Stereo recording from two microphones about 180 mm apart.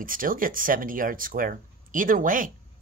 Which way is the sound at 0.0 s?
50° right (ahead or behind).